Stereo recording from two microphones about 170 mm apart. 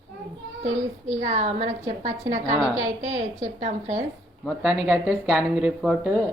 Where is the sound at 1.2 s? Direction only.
45° right (ahead or behind).